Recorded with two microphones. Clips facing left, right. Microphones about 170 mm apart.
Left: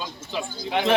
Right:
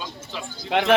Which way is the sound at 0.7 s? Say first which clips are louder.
Right 2 dB; 90° right.